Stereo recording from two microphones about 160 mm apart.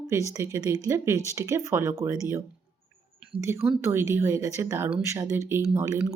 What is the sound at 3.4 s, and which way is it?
Speech, 15° right (ahead or behind).